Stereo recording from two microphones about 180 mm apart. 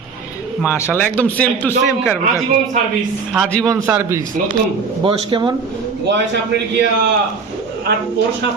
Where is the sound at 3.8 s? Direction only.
15° right (ahead or behind).